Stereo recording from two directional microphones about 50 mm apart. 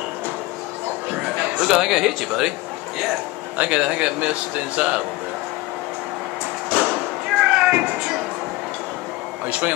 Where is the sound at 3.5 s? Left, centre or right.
Right.